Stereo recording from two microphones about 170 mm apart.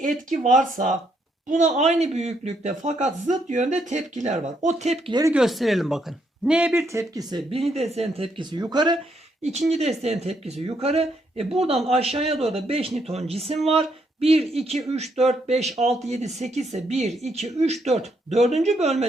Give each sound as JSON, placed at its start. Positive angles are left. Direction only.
{"t": 0.0, "sound": "speech", "side_deg": -50}
{"t": 5.3, "sound": "speech", "side_deg": 0}
{"t": 9.4, "sound": "speech", "side_deg": -40}